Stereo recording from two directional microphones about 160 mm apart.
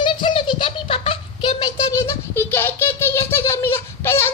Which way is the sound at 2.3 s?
15° left (ahead or behind).